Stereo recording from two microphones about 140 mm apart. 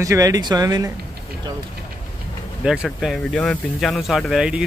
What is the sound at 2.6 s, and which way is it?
Speech, 5° right (ahead or behind).